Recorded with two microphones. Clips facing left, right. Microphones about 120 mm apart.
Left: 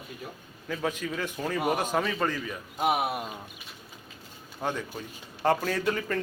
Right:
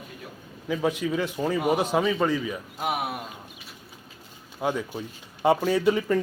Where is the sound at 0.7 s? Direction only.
10° right (ahead or behind).